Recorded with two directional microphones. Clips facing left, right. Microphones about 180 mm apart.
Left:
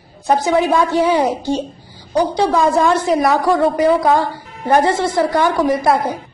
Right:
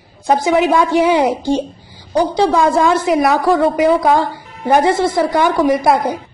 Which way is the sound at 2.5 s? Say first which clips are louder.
Right 1 dB; 10° right (ahead or behind).